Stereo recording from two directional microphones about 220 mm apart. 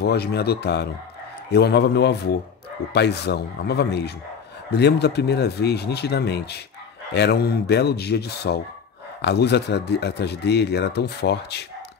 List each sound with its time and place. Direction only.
0.0 s speech: 45° left (ahead or behind)